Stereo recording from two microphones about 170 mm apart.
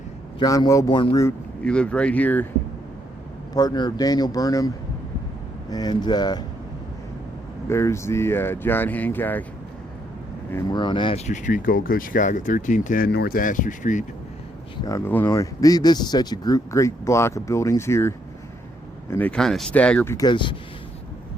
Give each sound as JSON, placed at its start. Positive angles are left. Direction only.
{"t": 0.3, "sound": "speech", "side_deg": 25}
{"t": 1.6, "sound": "speech", "side_deg": 5}
{"t": 3.5, "sound": "speech", "side_deg": 25}
{"t": 5.7, "sound": "speech", "side_deg": 25}
{"t": 7.7, "sound": "speech", "side_deg": 15}
{"t": 10.5, "sound": "speech", "side_deg": 25}
{"t": 11.3, "sound": "speech", "side_deg": 50}
{"t": 13.1, "sound": "speech", "side_deg": 70}
{"t": 14.8, "sound": "speech", "side_deg": 15}
{"t": 19.1, "sound": "speech", "side_deg": 10}
{"t": 20.1, "sound": "speech", "side_deg": 25}